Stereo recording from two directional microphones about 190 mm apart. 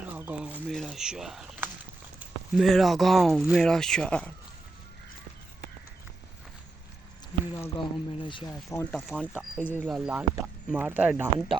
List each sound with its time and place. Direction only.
0.1 s a sound: 10° right (ahead or behind)
0.7 s speech: centre (ahead or behind)
7.5 s speech: 20° left (ahead or behind)
8.7 s speech: 10° left (ahead or behind)
9.1 s speech: 10° right (ahead or behind)
9.6 s speech: 10° left (ahead or behind)
9.8 s speech: 5° right (ahead or behind)